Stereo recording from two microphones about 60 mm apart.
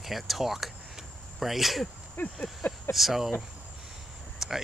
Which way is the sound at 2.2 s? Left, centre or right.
Left.